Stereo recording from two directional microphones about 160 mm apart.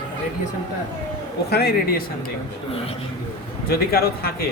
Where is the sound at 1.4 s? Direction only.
75° left (ahead or behind).